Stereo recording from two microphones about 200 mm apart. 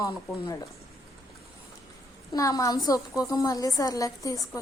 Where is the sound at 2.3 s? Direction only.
15° left (ahead or behind).